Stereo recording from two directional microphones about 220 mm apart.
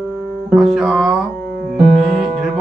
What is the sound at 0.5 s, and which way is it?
Music, centre (ahead or behind).